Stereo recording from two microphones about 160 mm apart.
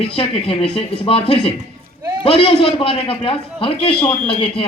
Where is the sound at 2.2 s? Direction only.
35° left (ahead or behind).